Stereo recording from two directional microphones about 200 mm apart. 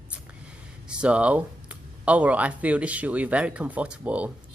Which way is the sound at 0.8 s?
5° right (ahead or behind).